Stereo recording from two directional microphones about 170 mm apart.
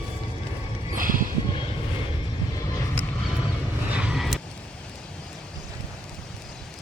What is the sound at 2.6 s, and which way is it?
Vehicle, 20° left (ahead or behind).